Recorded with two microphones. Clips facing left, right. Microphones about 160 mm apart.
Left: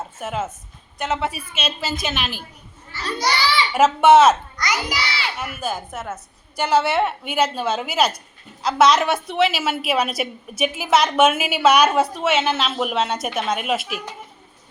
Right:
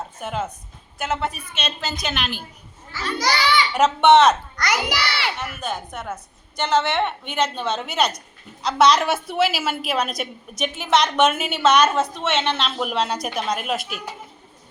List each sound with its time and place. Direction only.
0.2 s a woman's voice: 5° left (ahead or behind)
2.9 s a child's voice: 90° right
3.8 s a woman's voice: 5° left (ahead or behind)
4.5 s a child's voice: 60° right (ahead or behind)
5.4 s a woman's voice: 5° left (ahead or behind)